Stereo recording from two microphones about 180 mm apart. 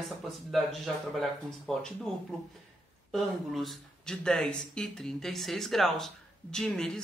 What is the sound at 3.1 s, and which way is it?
Speech, centre (ahead or behind).